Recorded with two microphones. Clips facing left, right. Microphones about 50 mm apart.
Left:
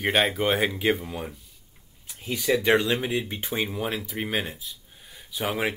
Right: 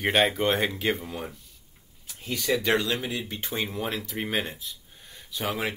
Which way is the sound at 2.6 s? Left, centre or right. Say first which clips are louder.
Left 5 dB; left.